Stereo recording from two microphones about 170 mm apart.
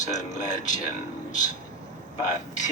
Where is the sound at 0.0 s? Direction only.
45° left (ahead or behind).